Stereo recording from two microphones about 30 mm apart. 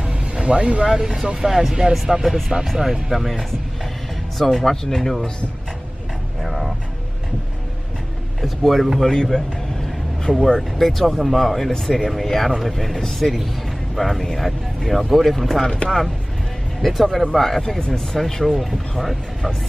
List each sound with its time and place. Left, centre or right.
0.4 s speech: right
0.8 s speech: centre
1.4 s speech: centre
2.6 s speech: centre
4.4 s speech: centre
6.4 s music: centre
8.4 s speech: centre
9.1 s speech: left
10.3 s speech: right
10.8 s speech: centre
15.8 s speech: left
16.8 s speech: centre